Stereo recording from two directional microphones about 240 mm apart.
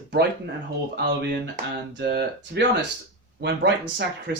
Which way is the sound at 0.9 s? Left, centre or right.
Right.